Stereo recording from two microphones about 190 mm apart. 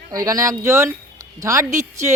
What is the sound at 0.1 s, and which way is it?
Speech, 20° right (ahead or behind).